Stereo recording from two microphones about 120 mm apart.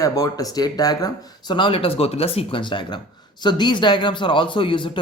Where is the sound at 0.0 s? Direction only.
30° left (ahead or behind).